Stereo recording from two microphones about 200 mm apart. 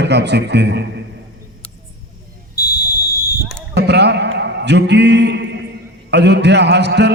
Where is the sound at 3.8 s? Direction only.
55° right (ahead or behind).